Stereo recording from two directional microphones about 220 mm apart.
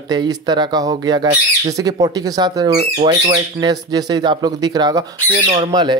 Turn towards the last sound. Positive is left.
turn(degrees=-20)  # may be behind; listen again after turning